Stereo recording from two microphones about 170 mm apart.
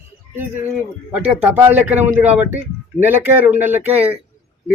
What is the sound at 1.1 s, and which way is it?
Speech, 5° right (ahead or behind).